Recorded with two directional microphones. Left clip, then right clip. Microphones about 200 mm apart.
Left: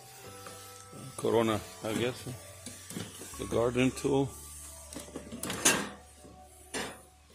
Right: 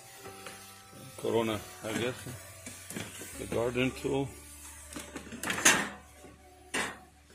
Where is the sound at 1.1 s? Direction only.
30° left (ahead or behind).